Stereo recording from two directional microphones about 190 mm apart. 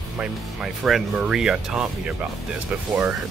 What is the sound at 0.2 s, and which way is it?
Speech, centre (ahead or behind).